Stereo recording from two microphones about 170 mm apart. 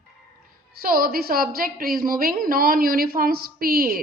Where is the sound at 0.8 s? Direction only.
60° right (ahead or behind).